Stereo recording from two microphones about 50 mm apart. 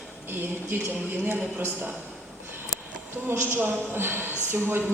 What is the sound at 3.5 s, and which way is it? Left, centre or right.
A woman's voice, right.